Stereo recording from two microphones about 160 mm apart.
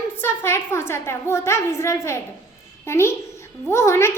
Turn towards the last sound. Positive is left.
turn(degrees=15)  # may be behind; listen again after turning